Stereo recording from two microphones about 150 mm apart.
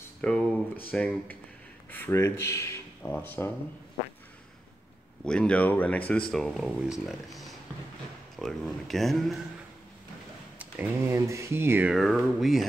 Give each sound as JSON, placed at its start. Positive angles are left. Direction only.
{"t": 0.2, "sound": "speech", "side_deg": 5}
{"t": 5.2, "sound": "speech", "side_deg": 5}
{"t": 8.4, "sound": "speech", "side_deg": 0}
{"t": 10.6, "sound": "speech", "side_deg": -15}
{"t": 11.9, "sound": "speech", "side_deg": 0}